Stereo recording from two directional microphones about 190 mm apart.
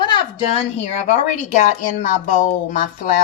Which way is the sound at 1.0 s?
40° left (ahead or behind).